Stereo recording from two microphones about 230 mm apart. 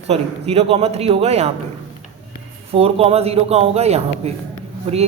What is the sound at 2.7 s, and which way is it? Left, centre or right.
A man's voice, right.